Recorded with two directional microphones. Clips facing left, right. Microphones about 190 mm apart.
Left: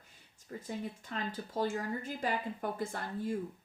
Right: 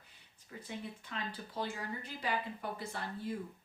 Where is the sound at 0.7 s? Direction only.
40° left (ahead or behind).